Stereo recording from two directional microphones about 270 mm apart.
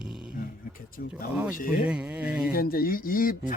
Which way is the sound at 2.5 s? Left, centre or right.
Left.